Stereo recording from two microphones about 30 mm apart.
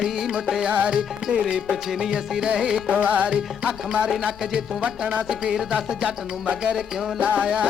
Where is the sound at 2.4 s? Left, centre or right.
Right.